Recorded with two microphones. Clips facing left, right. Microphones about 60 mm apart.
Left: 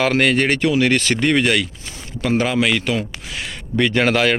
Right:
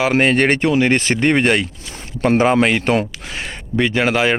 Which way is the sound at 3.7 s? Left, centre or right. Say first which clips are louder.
Even; centre.